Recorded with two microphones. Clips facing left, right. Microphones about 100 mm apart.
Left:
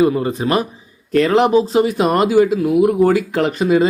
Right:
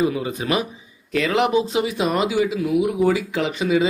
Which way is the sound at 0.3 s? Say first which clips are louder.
Left 5 dB; 35° left (ahead or behind).